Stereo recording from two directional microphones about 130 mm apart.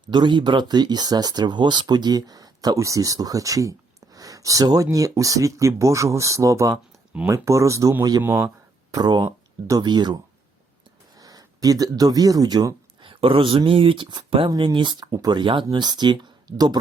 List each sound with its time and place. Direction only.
0.1 s speech: 35° right (ahead or behind)
8.2 s speech: 15° right (ahead or behind)
8.9 s speech: 30° right (ahead or behind)
11.2 s speech: 30° right (ahead or behind)